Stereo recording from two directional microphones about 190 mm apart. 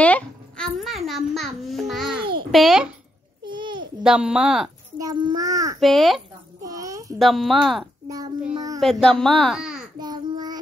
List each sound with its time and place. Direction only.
0.0 s a child's voice: 5° left (ahead or behind)
2.1 s babbling: 25° right (ahead or behind)
2.5 s a child's voice: centre (ahead or behind)
3.4 s a sound: 25° right (ahead or behind)
4.0 s a child's voice: 5° right (ahead or behind)
4.9 s a child's voice: 20° right (ahead or behind)
5.8 s a child's voice: centre (ahead or behind)
6.6 s a sound: 15° right (ahead or behind)
7.2 s a child's voice: centre (ahead or behind)
8.5 s a sound: 20° right (ahead or behind)
8.8 s a child's voice: 5° left (ahead or behind)
9.9 s child singing: 20° right (ahead or behind)